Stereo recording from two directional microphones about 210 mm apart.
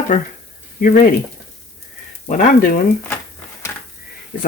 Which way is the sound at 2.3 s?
40° left (ahead or behind).